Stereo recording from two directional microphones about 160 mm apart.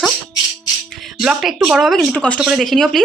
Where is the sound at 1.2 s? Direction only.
5° right (ahead or behind).